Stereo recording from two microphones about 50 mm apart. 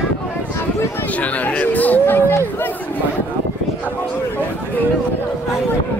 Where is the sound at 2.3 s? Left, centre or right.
Left.